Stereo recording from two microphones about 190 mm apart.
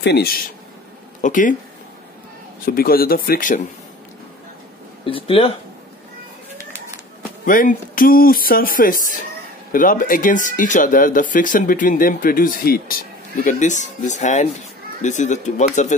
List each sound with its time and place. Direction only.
0.0 s speech: 55° left (ahead or behind)
1.2 s speech: 45° left (ahead or behind)
2.6 s speech: 50° left (ahead or behind)
5.0 s speech: 30° left (ahead or behind)
7.4 s speech: 45° left (ahead or behind)